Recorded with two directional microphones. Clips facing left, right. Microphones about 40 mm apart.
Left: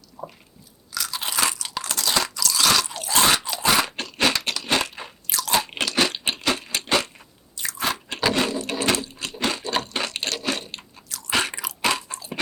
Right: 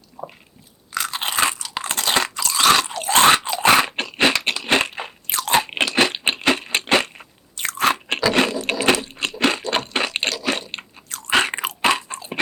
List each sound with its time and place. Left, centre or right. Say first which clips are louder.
0.2 s biting: right 2 dB; right
0.9 s crunch: right 5 dB; right
7.5 s biting: right 7 dB; right
8.9 s a sound: right 5 dB; right
11.8 s crunch: right 4 dB; right